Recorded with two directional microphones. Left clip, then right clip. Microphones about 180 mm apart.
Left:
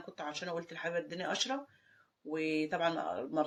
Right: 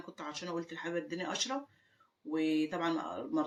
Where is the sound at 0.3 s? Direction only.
45° left (ahead or behind).